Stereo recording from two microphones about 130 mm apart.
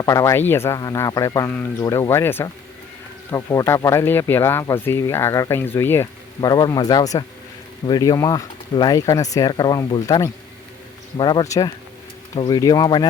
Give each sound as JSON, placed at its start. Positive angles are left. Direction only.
{"t": 0.0, "sound": "speech", "side_deg": 25}
{"t": 6.4, "sound": "speech", "side_deg": 30}